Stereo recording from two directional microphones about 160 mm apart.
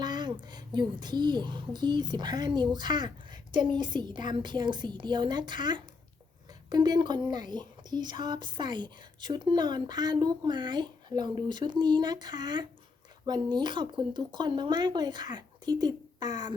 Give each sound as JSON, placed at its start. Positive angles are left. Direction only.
{"t": 0.0, "sound": "speech", "side_deg": -30}